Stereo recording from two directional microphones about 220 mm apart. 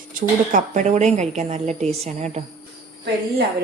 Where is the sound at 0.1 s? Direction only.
35° right (ahead or behind).